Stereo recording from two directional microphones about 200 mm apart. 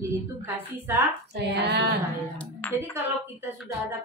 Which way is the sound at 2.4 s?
10° left (ahead or behind).